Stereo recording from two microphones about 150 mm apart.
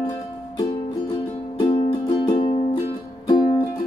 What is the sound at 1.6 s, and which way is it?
Music, 35° left (ahead or behind).